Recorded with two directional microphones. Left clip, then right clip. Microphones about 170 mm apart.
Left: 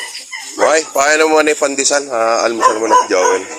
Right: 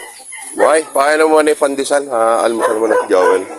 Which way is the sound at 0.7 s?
10° right (ahead or behind).